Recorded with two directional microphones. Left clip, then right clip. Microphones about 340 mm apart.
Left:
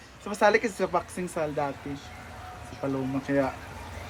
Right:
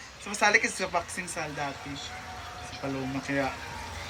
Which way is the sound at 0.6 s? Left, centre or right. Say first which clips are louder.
Right 2 dB; left.